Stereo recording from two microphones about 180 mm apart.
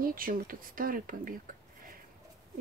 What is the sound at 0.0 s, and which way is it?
Speech, 50° right (ahead or behind).